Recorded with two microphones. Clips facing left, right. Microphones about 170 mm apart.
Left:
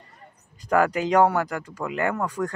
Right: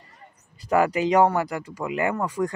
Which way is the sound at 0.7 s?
5° right (ahead or behind).